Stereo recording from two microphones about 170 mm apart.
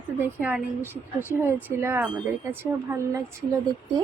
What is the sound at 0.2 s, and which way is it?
Speech, 10° right (ahead or behind).